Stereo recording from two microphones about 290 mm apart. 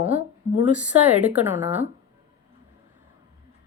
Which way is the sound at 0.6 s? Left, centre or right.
Centre.